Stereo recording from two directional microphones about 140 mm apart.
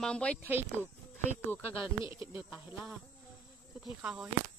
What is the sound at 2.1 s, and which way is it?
Speech, 15° right (ahead or behind).